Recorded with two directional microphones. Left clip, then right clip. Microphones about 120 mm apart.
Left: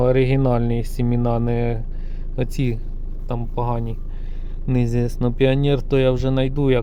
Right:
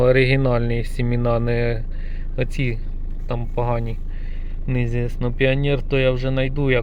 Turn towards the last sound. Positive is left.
turn(degrees=40)  # may be behind; listen again after turning